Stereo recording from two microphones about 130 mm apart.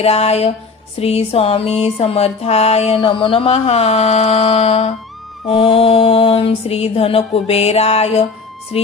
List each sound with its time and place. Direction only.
0.0 s music: 50° left (ahead or behind)